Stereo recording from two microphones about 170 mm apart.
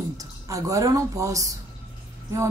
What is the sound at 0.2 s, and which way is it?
A woman's voice, 20° right (ahead or behind).